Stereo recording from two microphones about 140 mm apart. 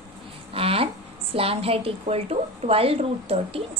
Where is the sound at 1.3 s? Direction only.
45° right (ahead or behind).